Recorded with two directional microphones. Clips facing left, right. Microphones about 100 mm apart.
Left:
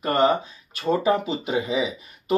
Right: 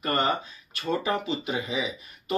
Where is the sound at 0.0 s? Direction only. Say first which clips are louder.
Left 6 dB; 30° left (ahead or behind).